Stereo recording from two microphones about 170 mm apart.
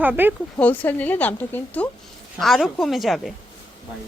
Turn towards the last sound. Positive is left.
turn(degrees=0)  # may be behind; listen again after turning